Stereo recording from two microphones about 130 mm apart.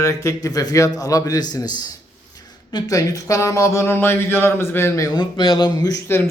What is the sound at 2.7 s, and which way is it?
Speech, 25° left (ahead or behind).